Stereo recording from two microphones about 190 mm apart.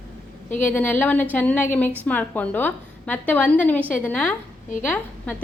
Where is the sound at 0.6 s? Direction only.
10° left (ahead or behind).